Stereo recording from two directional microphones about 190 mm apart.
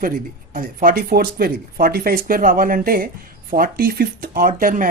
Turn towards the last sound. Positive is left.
turn(degrees=-45)  # may be behind; listen again after turning